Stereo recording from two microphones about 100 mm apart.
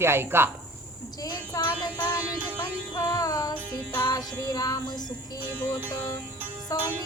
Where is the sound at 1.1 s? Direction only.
40° left (ahead or behind).